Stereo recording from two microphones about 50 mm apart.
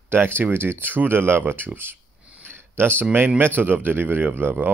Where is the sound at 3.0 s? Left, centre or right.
Right.